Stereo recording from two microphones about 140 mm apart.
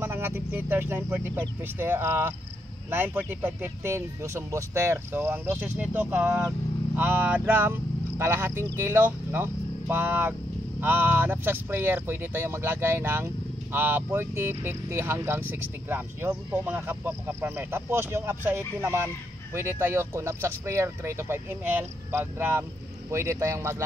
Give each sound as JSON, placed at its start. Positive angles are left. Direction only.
{"t": 0.0, "sound": "speech", "side_deg": -15}